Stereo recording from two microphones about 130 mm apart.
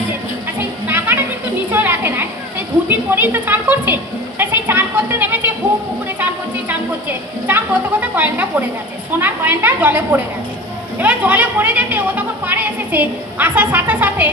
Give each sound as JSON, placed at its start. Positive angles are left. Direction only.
{"t": 0.9, "sound": "a sound", "side_deg": -15}
{"t": 3.1, "sound": "speech", "side_deg": -15}
{"t": 7.4, "sound": "speech", "side_deg": -15}